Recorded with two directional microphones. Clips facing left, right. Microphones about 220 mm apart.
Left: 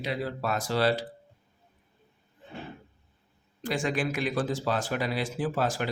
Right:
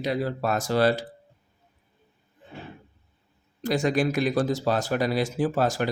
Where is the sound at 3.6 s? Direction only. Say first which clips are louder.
Right 5 dB; 40° right (ahead or behind).